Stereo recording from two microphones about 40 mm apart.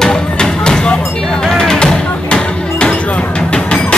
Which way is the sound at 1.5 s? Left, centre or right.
Centre.